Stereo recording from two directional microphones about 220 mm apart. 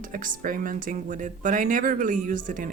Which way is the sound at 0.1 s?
40° right (ahead or behind).